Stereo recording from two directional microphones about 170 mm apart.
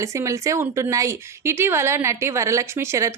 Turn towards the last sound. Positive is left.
turn(degrees=-15)  # may be behind; listen again after turning